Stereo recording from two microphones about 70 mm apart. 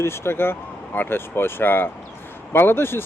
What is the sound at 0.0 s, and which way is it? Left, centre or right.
Speech, left.